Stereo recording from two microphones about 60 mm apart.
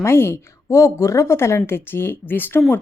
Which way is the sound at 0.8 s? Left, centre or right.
Left.